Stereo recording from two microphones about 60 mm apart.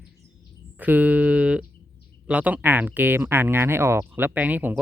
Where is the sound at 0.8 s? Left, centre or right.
Right.